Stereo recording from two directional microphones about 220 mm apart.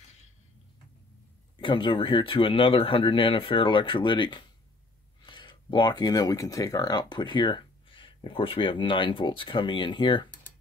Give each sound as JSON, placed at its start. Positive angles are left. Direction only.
{"t": 1.6, "sound": "speech", "side_deg": 20}